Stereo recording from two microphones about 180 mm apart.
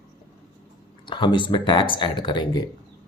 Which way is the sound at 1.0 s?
25° left (ahead or behind).